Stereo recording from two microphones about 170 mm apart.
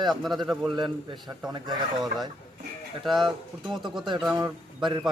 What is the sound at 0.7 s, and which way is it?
A man's voice, 25° right (ahead or behind).